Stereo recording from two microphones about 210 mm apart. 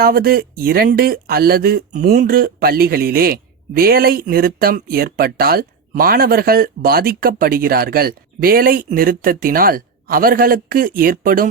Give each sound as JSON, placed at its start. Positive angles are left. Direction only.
{"t": 0.0, "sound": "speech", "side_deg": -45}